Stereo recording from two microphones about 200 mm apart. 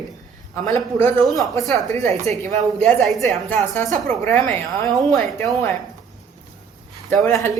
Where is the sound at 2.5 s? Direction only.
35° right (ahead or behind).